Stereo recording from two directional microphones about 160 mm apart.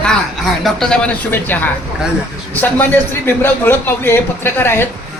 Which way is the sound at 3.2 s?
15° left (ahead or behind).